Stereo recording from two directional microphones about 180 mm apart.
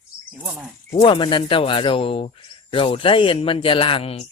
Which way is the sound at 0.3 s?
10° right (ahead or behind).